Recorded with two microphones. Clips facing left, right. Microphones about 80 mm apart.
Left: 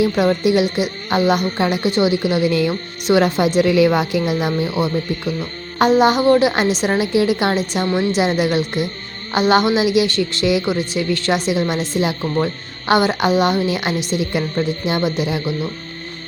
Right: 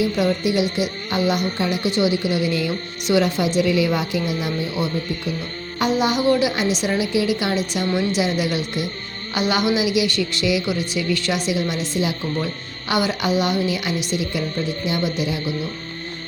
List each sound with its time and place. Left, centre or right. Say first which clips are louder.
0.0 s a woman's voice: left 4 dB; left
5.8 s a woman's voice: left 6 dB; left